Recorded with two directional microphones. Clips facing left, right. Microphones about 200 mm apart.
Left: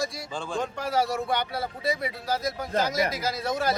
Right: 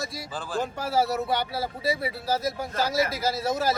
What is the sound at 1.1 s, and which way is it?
Speech, 5° right (ahead or behind).